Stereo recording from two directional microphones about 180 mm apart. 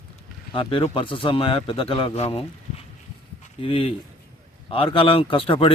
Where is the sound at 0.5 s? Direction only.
30° left (ahead or behind).